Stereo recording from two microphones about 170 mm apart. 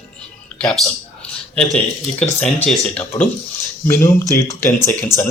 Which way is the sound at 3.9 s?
20° left (ahead or behind).